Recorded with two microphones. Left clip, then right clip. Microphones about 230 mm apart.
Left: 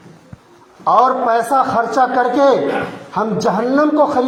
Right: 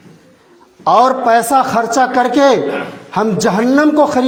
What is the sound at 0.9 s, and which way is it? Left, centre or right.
A man's voice, right.